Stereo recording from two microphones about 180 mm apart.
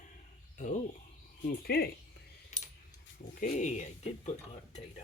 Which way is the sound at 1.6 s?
60° left (ahead or behind).